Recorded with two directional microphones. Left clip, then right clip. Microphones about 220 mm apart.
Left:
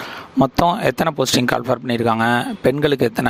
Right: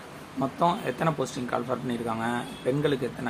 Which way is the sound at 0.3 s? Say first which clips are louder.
Left 10 dB; 50° left (ahead or behind).